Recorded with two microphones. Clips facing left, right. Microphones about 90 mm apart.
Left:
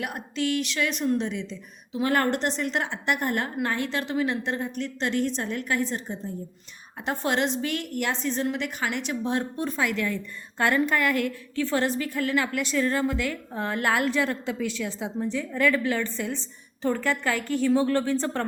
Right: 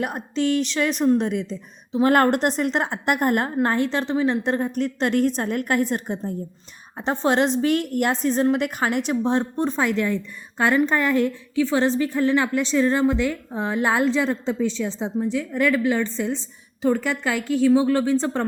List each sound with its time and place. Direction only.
0.0 s a woman's voice: 35° right (ahead or behind)
2.0 s a woman's voice: 50° right (ahead or behind); by 4.4 s 30° right (ahead or behind)
4.4 s a woman's voice: 40° right (ahead or behind)
7.0 s a woman's voice: 30° right (ahead or behind)
10.6 s a woman's voice: 20° right (ahead or behind)
15.2 s a woman's voice: 15° right (ahead or behind)